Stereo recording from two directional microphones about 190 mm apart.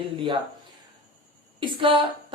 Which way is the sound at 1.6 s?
25° right (ahead or behind).